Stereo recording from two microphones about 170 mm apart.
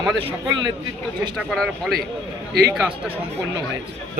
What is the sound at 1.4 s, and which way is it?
Speech, 5° left (ahead or behind).